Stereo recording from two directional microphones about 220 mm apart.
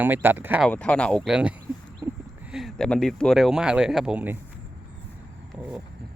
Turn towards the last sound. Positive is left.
turn(degrees=-5)  # may be behind; listen again after turning